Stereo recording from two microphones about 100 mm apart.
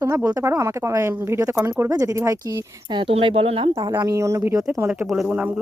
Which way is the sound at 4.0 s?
35° right (ahead or behind).